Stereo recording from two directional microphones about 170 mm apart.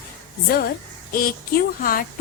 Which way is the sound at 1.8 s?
55° left (ahead or behind).